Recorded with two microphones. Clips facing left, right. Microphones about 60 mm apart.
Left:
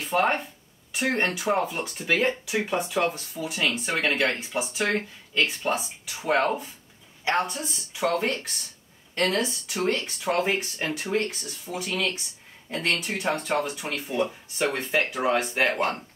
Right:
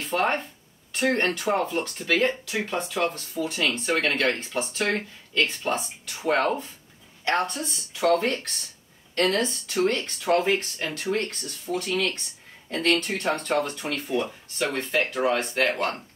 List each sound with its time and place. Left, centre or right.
0.0 s speech: centre